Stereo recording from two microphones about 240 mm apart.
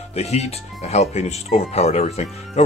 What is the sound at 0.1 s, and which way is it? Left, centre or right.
Speech, left.